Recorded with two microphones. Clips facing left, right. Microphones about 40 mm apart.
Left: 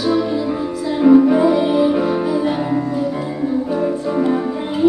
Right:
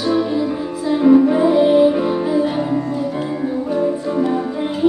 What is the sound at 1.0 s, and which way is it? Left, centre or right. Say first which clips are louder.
Music: left 1 dB; centre.